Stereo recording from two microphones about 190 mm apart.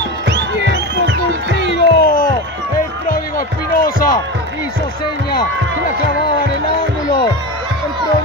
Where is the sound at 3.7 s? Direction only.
50° left (ahead or behind).